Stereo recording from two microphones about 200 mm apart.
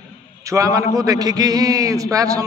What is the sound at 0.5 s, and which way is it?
A man's voice, 15° right (ahead or behind).